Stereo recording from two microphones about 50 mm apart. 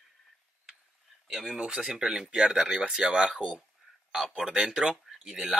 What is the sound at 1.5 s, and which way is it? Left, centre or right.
A man's voice, centre.